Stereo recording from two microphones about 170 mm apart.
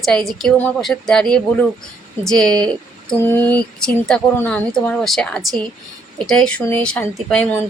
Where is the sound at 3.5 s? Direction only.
5° left (ahead or behind).